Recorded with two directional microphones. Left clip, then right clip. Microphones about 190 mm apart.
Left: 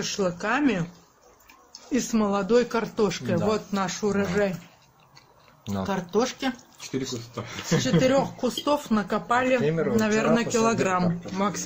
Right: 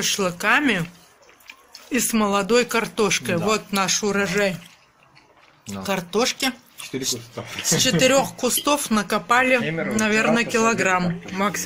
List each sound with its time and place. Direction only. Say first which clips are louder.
0.0 s speech: right 5 dB; centre (ahead or behind)
1.9 s speech: right 4 dB; 5° right (ahead or behind); by 4.6 s 30° right (ahead or behind)
5.9 s speech: right 4 dB; 25° right (ahead or behind)
7.3 s speech: right 2 dB; centre (ahead or behind)
8.0 s speech: right 4 dB; 20° right (ahead or behind); by 11.6 s centre (ahead or behind)